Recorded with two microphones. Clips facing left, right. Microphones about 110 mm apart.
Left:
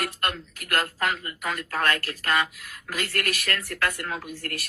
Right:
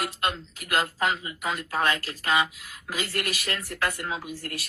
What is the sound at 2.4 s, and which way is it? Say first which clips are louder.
Speech: even; centre (ahead or behind).